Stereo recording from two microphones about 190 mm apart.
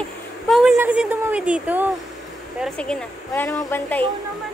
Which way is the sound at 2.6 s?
5° left (ahead or behind).